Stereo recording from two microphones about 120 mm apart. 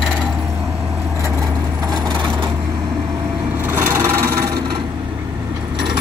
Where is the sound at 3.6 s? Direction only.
20° right (ahead or behind).